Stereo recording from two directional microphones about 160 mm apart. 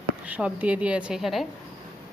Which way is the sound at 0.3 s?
10° right (ahead or behind).